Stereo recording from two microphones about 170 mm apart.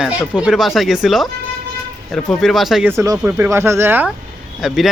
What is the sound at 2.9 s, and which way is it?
Speech, 20° right (ahead or behind).